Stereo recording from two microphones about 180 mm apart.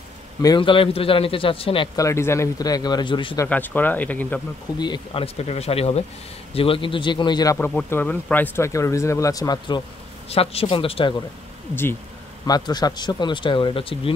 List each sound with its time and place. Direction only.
0.4 s speech: 25° left (ahead or behind)
2.0 s speech: 15° left (ahead or behind)
3.3 s speech: 10° left (ahead or behind)
4.7 s speech: 25° left (ahead or behind)
7.5 s speech: 10° left (ahead or behind); by 11.1 s 30° left (ahead or behind)
11.7 s speech: 10° left (ahead or behind)
12.4 s speech: 20° left (ahead or behind)